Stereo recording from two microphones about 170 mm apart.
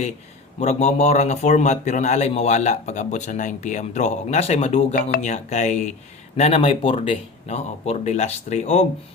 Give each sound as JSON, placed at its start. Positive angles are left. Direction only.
{"t": 0.6, "sound": "a man's voice", "side_deg": 40}
{"t": 4.9, "sound": "speech", "side_deg": 60}
{"t": 5.3, "sound": "a man's voice", "side_deg": 45}